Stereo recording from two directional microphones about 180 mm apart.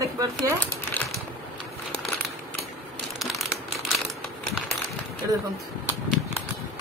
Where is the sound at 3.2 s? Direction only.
Centre (ahead or behind).